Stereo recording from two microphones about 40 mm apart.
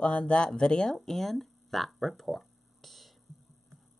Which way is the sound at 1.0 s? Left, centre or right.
Centre.